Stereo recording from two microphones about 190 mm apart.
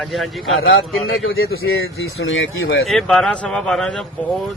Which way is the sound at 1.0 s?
90° left.